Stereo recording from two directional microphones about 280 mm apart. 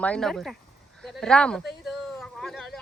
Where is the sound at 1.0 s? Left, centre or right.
Centre.